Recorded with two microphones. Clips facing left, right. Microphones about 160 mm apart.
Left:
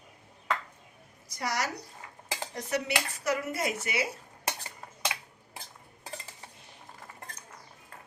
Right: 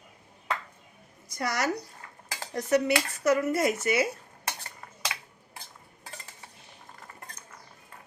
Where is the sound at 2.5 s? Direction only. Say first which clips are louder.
Right 8 dB; 50° right (ahead or behind).